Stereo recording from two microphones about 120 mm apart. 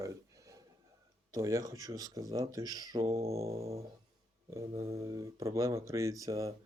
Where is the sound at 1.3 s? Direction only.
30° right (ahead or behind).